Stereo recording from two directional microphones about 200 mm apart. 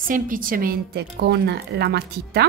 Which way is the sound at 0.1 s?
45° right (ahead or behind).